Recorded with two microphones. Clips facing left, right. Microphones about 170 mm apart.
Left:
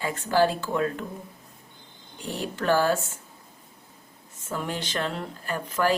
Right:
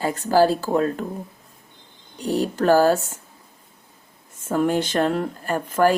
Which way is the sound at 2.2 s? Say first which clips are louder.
Right 8 dB; 40° right (ahead or behind).